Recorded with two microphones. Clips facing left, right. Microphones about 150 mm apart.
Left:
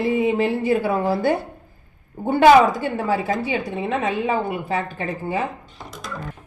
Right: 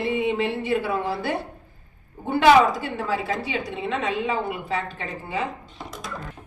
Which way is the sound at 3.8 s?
45° left (ahead or behind).